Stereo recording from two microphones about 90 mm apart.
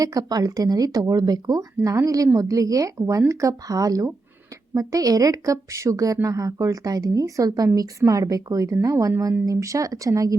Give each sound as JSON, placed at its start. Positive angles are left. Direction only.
{"t": 0.0, "sound": "speech", "side_deg": -40}